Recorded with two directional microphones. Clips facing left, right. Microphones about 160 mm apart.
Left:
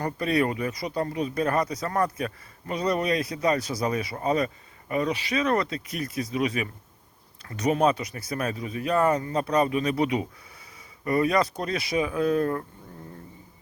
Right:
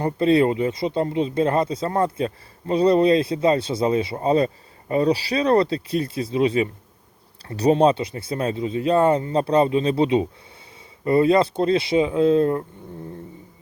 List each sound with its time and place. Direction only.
0.0 s speech: 25° right (ahead or behind)